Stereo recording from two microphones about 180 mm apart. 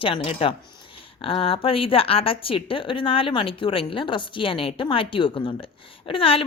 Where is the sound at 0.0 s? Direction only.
30° left (ahead or behind).